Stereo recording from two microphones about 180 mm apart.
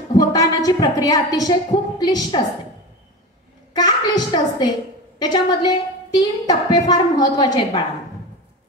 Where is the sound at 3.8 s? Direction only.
25° left (ahead or behind).